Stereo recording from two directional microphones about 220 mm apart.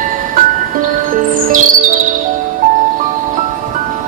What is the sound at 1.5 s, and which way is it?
Music, 40° right (ahead or behind).